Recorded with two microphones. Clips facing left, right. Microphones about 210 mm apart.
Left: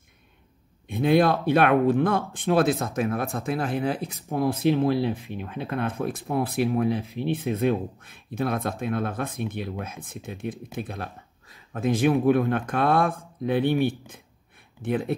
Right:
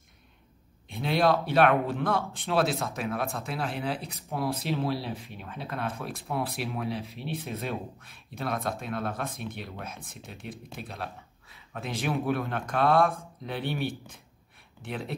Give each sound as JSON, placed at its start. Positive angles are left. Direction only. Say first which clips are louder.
{"t": 0.8, "sound": "speech", "louder": "left 5 dB", "side_deg": 55}